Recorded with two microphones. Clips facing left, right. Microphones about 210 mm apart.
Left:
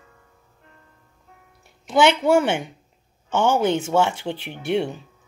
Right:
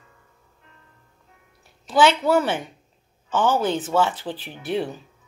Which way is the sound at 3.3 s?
25° left (ahead or behind).